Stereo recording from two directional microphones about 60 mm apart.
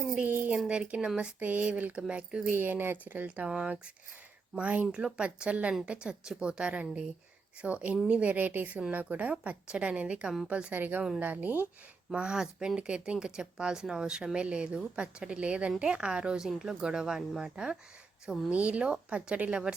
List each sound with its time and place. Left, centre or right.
0.2 s a woman's voice: right
1.4 s a woman's voice: right
2.5 s speech: right; by 3.8 s centre
4.5 s a woman's voice: right
4.9 s a woman's voice: centre
12.1 s a woman's voice: centre